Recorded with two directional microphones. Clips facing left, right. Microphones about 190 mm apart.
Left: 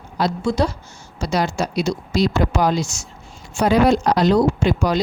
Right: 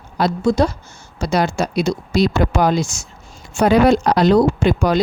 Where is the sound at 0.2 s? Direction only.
45° right (ahead or behind).